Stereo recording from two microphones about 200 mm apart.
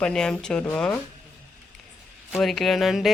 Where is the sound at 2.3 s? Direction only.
Centre (ahead or behind).